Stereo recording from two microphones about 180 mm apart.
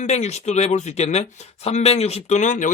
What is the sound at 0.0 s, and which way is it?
Speech, 40° left (ahead or behind).